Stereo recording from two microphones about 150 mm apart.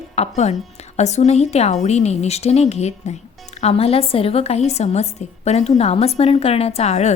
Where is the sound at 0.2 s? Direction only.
50° left (ahead or behind).